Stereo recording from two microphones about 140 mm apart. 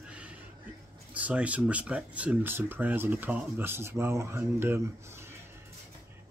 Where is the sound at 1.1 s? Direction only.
10° right (ahead or behind).